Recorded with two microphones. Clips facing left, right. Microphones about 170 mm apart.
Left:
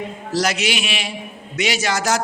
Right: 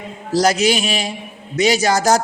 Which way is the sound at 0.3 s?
35° right (ahead or behind).